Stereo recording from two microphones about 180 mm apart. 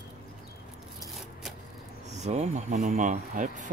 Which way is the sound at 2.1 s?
40° right (ahead or behind).